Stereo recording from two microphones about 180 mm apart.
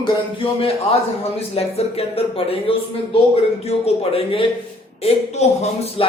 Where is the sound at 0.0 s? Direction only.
30° left (ahead or behind).